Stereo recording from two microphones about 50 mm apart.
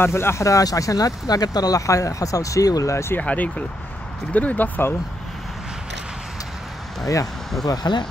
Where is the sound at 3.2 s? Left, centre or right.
Left.